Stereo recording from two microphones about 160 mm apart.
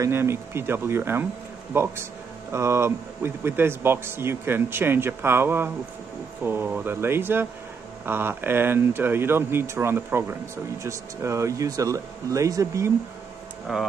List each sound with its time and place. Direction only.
0.0 s a man's voice: 15° right (ahead or behind)
13.7 s speech: 5° right (ahead or behind)